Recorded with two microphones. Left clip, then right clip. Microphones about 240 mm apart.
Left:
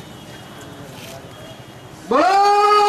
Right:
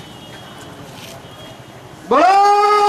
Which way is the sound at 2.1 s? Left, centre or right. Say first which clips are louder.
Right 3 dB; centre.